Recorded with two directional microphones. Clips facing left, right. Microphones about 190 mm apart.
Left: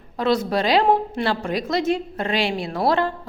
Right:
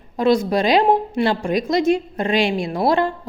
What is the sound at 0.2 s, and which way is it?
A woman's voice, 15° right (ahead or behind).